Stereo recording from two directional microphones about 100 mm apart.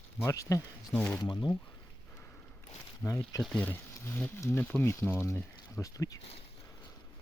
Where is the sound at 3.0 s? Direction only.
20° left (ahead or behind).